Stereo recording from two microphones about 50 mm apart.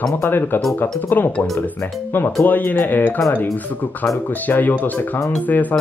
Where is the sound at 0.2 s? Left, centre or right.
Left.